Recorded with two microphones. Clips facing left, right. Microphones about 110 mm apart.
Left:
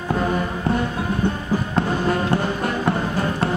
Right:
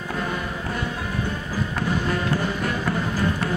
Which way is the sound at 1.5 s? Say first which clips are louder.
Left 4 dB; 30° left (ahead or behind).